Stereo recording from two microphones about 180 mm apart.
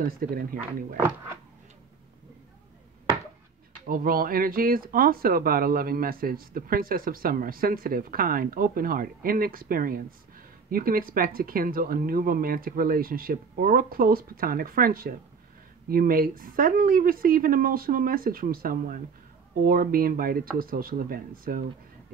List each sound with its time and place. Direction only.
0.0 s speech: 55° right (ahead or behind)
0.6 s speech: 10° right (ahead or behind)
3.8 s speech: 50° right (ahead or behind)